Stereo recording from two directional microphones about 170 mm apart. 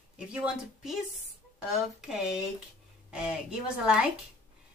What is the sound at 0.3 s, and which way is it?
Speech, 5° right (ahead or behind).